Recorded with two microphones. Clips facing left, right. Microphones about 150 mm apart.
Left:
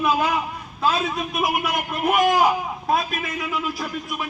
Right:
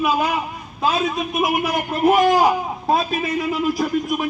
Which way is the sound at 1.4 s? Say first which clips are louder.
Right 3 dB; 30° right (ahead or behind).